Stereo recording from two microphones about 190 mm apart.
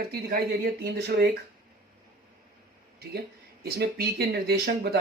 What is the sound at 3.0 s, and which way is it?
Speech, 55° right (ahead or behind).